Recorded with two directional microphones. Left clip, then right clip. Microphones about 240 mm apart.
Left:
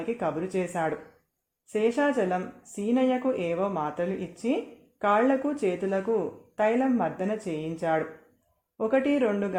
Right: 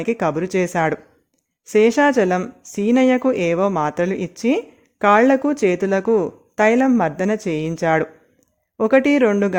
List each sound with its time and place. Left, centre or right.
0.0 s speech: right